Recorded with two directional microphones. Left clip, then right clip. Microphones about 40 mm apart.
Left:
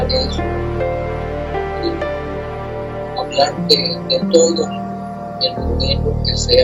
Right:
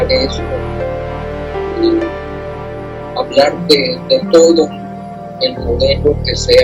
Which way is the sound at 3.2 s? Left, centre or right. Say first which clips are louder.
Right 5 dB; left.